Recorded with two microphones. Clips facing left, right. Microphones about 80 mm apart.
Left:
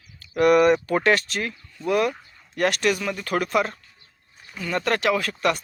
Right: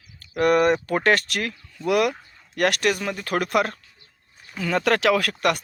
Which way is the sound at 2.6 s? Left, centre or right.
Right.